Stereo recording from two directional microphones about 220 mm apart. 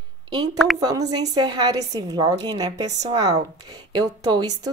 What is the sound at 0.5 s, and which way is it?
Speech, centre (ahead or behind).